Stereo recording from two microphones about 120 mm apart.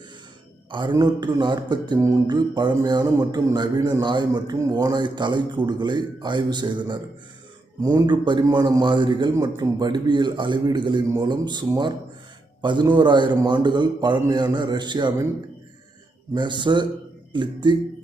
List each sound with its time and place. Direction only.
0.7 s a man's voice: 40° right (ahead or behind)
2.0 s a sound: 25° right (ahead or behind)
2.2 s a man's voice: 35° right (ahead or behind)
12.6 s a man's voice: 40° right (ahead or behind)
16.3 s a man's voice: 40° right (ahead or behind)